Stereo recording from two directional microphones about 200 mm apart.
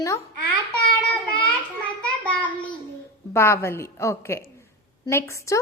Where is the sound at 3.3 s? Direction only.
15° left (ahead or behind).